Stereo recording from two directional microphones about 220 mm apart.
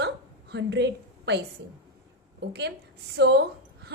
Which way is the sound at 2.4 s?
50° right (ahead or behind).